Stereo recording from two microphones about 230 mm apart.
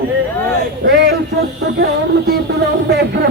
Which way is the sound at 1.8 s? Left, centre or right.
Right.